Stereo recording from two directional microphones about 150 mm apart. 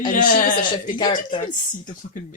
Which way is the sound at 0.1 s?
65° left (ahead or behind).